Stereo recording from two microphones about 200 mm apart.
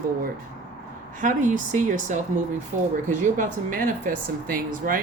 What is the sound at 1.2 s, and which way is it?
Speech, 40° right (ahead or behind).